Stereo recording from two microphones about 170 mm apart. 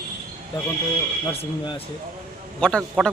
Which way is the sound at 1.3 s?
30° left (ahead or behind).